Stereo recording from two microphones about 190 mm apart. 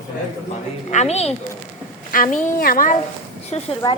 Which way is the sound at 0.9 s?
35° left (ahead or behind).